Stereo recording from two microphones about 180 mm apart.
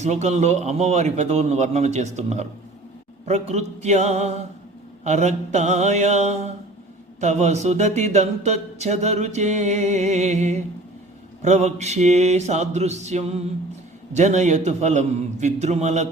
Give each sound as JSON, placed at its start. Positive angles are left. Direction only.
{"t": 0.0, "sound": "speech", "side_deg": -40}